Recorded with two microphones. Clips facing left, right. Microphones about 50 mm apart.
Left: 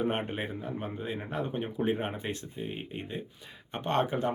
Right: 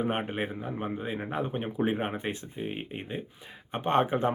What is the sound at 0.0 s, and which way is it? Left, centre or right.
Speech, centre.